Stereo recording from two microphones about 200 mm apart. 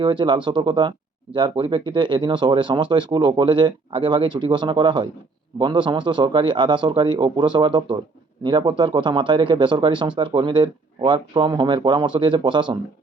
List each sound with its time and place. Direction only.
0.0 s speech: 25° right (ahead or behind)